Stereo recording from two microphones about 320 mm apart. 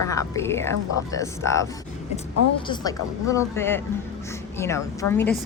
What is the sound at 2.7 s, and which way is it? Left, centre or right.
A woman's voice, centre.